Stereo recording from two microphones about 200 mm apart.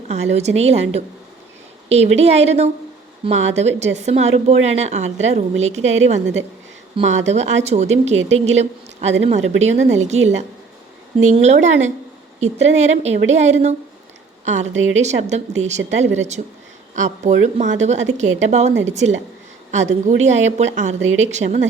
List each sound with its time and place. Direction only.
0.1 s a woman's voice: 35° right (ahead or behind)